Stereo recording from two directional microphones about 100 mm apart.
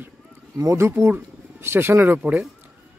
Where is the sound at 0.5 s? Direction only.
30° right (ahead or behind); by 2.5 s 15° right (ahead or behind).